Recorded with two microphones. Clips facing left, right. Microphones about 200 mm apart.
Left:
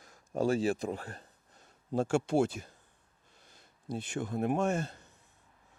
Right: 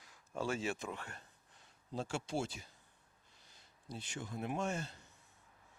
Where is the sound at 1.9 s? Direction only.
50° left (ahead or behind).